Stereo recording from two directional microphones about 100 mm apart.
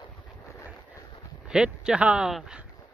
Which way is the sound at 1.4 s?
5° right (ahead or behind).